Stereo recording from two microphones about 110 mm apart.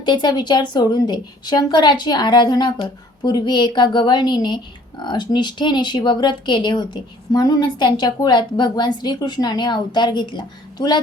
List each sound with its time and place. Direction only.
0.0 s speech: 45° left (ahead or behind)